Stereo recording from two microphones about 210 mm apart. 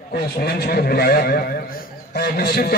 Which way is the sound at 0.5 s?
50° left (ahead or behind).